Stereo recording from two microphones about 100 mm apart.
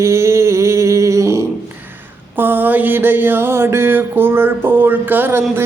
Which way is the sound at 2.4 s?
20° right (ahead or behind).